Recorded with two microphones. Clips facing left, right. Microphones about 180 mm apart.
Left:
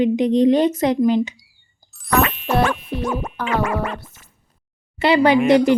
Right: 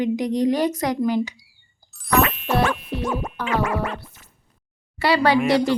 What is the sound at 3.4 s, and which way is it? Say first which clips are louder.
Music: left 2 dB; 55° left (ahead or behind).